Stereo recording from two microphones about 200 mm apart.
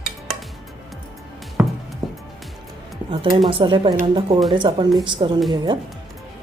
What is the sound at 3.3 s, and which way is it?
Speech, 25° right (ahead or behind).